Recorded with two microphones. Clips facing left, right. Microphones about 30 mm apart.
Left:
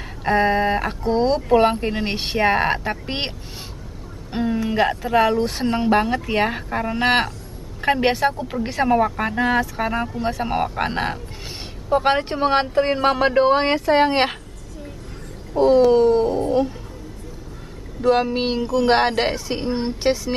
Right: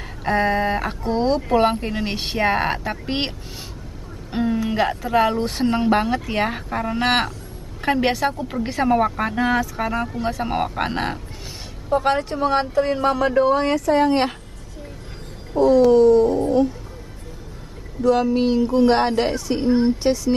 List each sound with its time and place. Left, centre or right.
0.2 s speech: centre
4.3 s a sound: centre
4.6 s a woman's voice: centre
9.8 s speech: centre
11.9 s a woman's voice: left
12.2 s speech: left
15.5 s speech: left
15.9 s dog: left
18.0 s dog: left
18.8 s speech: left
19.3 s a woman's voice: left